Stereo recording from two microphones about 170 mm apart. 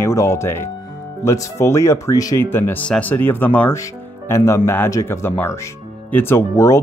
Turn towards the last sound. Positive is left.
turn(degrees=15)  # may be behind; listen again after turning